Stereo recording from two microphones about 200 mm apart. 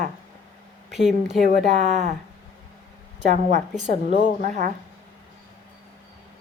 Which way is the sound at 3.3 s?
40° right (ahead or behind).